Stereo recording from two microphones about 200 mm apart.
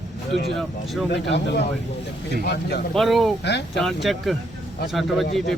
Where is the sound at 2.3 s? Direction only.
55° left (ahead or behind).